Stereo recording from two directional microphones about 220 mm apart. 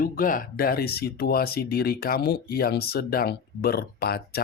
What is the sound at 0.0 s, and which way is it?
Speech, 40° left (ahead or behind).